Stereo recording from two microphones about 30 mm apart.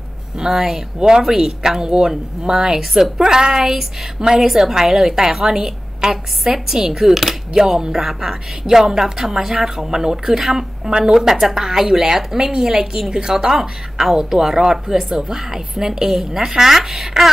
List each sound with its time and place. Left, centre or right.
0.4 s speech: centre
0.9 s a woman's voice: right
1.2 s a woman's voice: centre
10.9 s a woman's voice: right
11.1 s a woman's voice: centre